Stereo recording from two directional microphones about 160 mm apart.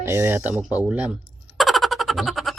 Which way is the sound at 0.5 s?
10° right (ahead or behind).